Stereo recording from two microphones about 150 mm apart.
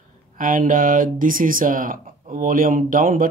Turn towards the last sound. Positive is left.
turn(degrees=-65)  # may be behind; listen again after turning